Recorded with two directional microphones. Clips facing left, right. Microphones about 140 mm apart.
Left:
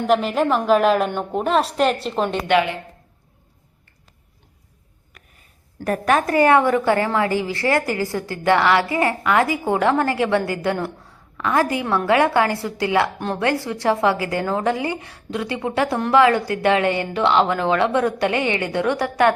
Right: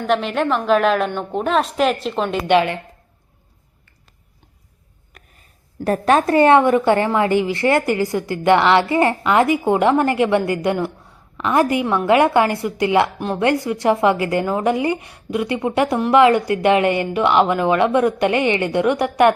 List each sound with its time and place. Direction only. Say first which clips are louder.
0.1 s a woman's voice: even; centre (ahead or behind)
5.1 s a sound: right 2 dB; 40° right (ahead or behind)
5.8 s a woman's voice: right 3 dB; 30° right (ahead or behind)
13.1 s a woman's voice: right 2 dB; 5° right (ahead or behind)
13.4 s speech: right 4 dB; 20° right (ahead or behind)